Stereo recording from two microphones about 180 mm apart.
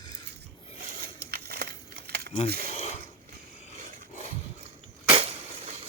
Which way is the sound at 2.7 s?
35° left (ahead or behind).